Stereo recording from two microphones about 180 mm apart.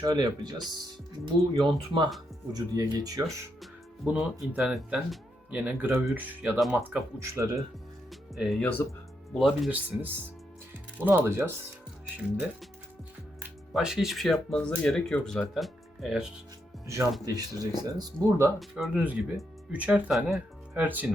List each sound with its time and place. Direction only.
0.0 s speech: 20° right (ahead or behind)
1.5 s speech: 25° right (ahead or behind)
3.6 s speech: 5° right (ahead or behind)
8.1 s speech: centre (ahead or behind)
13.7 s speech: centre (ahead or behind)
16.8 s speech: 15° right (ahead or behind)
18.6 s speech: centre (ahead or behind)